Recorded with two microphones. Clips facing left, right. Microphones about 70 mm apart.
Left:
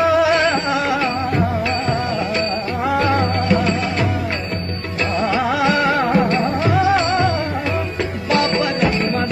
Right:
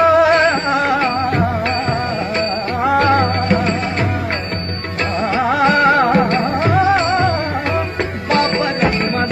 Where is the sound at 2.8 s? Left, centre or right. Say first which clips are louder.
Right 4 dB; right.